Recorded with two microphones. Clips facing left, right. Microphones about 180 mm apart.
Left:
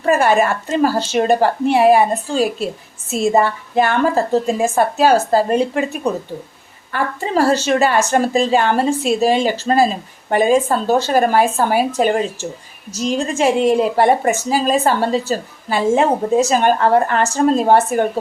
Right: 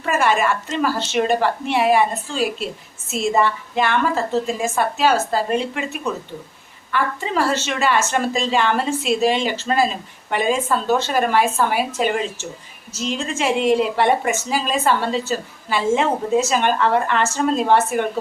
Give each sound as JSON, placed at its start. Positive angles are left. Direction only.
{"t": 0.0, "sound": "a woman's voice", "side_deg": 35}